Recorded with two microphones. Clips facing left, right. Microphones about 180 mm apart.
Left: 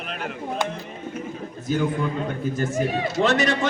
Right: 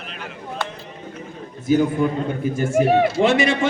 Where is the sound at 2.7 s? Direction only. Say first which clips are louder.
Right 13 dB; 65° right (ahead or behind).